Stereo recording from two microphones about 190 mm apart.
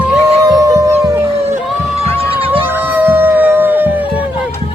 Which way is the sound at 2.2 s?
30° right (ahead or behind).